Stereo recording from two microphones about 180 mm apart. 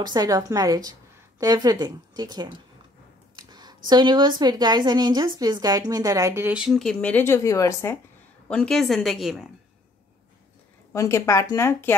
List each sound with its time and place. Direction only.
0.0 s speech: 20° right (ahead or behind); by 8.0 s 15° left (ahead or behind)
8.5 s a woman's voice: 5° left (ahead or behind)
10.9 s speech: 15° left (ahead or behind)